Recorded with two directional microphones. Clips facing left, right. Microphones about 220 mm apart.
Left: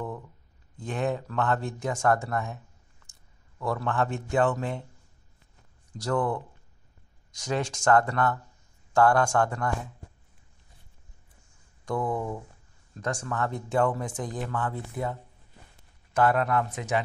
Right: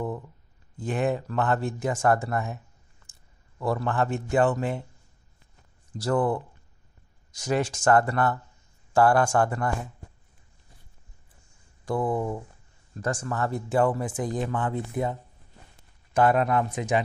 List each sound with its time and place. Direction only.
0.7 s speech: 5° right (ahead or behind)
3.6 s speech: 5° right (ahead or behind)
5.9 s speech: 5° right (ahead or behind)
11.8 s speech: 5° right (ahead or behind)
12.9 s speech: 5° right (ahead or behind)